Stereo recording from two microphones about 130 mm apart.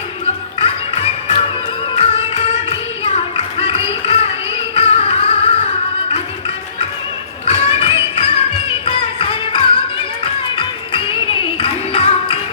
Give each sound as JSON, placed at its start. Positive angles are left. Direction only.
{"t": 0.6, "sound": "music", "side_deg": 50}
{"t": 2.0, "sound": "a sound", "side_deg": 50}
{"t": 4.7, "sound": "music", "side_deg": 50}
{"t": 7.4, "sound": "music", "side_deg": 50}